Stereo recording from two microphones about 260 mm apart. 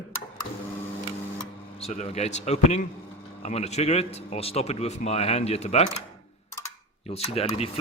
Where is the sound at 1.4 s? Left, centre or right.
Left.